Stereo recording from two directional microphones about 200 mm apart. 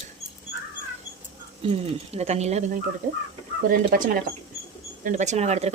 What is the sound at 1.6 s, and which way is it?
Speech, 30° right (ahead or behind).